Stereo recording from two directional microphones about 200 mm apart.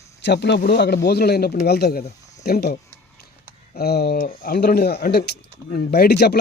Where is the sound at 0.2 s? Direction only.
60° left (ahead or behind).